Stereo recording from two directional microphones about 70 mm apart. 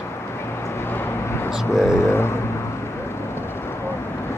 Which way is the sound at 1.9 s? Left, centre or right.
Left.